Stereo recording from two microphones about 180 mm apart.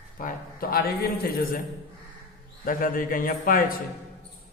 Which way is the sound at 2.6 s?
50° left (ahead or behind).